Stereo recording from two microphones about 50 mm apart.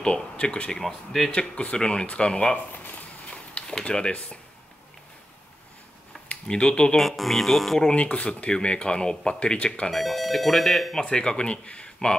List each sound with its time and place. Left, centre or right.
0.0 s speech: centre
1.3 s speech: left
3.8 s speech: left
6.2 s speech: centre
7.0 s speech: centre
7.9 s speech: left
9.8 s speech: centre
11.0 s speech: centre